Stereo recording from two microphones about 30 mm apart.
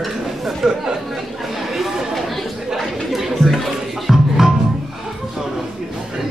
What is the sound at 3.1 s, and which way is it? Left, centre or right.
Chatter, centre.